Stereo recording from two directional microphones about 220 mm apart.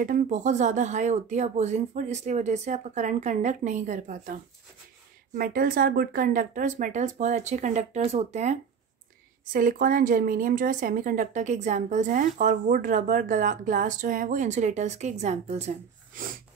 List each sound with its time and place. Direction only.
0.0 s a woman's voice: 35° right (ahead or behind)
5.4 s a woman's voice: 40° right (ahead or behind)